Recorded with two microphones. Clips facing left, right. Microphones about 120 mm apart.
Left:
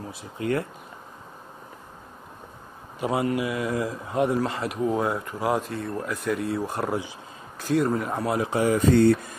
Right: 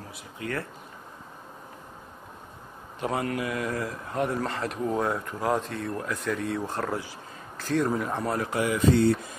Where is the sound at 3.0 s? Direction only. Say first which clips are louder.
Left 4 dB; 5° left (ahead or behind).